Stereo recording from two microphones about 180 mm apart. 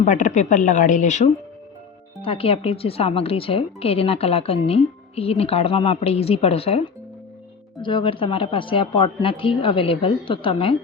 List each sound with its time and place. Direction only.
0.0 s a woman's voice: 45° left (ahead or behind)
2.2 s a woman's voice: 30° left (ahead or behind)